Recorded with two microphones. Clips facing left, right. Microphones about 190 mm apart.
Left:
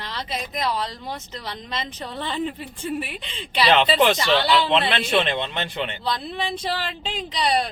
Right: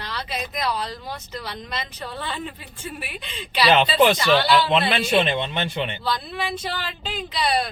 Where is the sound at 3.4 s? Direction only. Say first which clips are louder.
Right 1 dB; 10° right (ahead or behind).